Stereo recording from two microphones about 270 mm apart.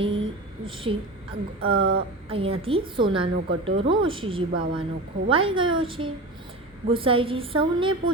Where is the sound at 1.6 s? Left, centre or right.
Right.